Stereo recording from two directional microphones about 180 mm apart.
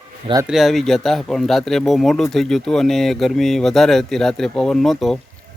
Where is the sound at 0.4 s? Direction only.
Centre (ahead or behind).